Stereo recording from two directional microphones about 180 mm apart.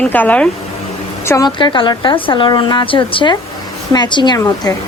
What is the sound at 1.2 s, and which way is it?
A woman's voice, 20° left (ahead or behind).